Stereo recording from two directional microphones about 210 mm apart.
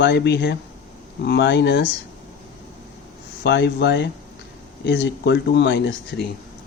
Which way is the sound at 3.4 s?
55° left (ahead or behind).